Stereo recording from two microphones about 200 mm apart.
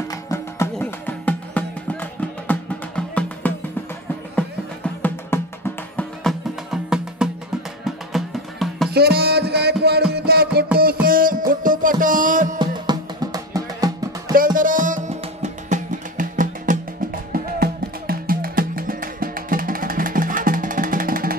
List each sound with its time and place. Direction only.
0.1 s music: 15° left (ahead or behind)
8.9 s music: 55° right (ahead or behind)
12.5 s music: 20° right (ahead or behind)
14.3 s music: 45° right (ahead or behind)